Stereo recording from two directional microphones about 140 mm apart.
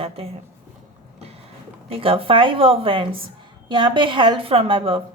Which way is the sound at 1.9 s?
40° right (ahead or behind).